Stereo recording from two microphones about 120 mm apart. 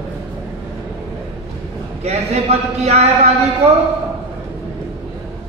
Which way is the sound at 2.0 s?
60° right (ahead or behind).